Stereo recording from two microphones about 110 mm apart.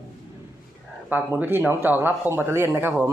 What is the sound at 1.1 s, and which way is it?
Speech, 15° right (ahead or behind).